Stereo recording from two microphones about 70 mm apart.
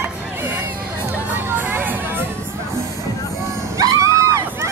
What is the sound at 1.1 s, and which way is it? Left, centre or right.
Music, right.